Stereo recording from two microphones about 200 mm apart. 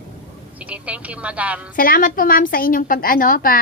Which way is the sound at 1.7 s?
45° left (ahead or behind).